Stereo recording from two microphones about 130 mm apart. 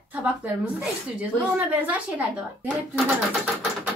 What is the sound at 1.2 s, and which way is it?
Speech, 10° right (ahead or behind).